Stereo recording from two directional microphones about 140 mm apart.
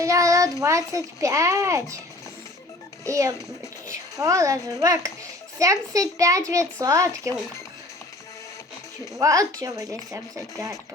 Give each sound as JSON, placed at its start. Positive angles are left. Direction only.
{"t": 0.0, "sound": "a child's voice", "side_deg": -25}
{"t": 3.0, "sound": "a child's voice", "side_deg": -25}
{"t": 9.1, "sound": "a child's voice", "side_deg": -25}